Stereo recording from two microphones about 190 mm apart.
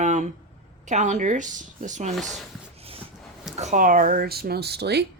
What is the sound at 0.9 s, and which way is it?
A woman's voice, 40° right (ahead or behind).